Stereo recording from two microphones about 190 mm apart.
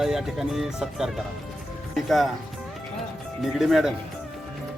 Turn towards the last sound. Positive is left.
turn(degrees=0)  # may be behind; listen again after turning